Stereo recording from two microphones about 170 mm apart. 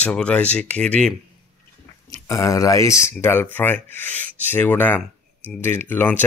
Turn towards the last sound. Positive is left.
turn(degrees=10)  # may be behind; listen again after turning